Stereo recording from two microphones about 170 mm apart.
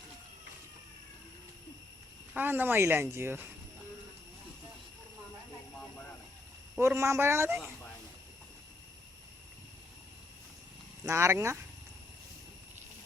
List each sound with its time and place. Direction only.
2.3 s speech: 10° right (ahead or behind)
6.7 s speech: 15° right (ahead or behind)
11.0 s speech: 15° right (ahead or behind)